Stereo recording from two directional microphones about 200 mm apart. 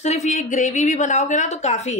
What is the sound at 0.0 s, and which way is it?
A woman's voice, 35° left (ahead or behind).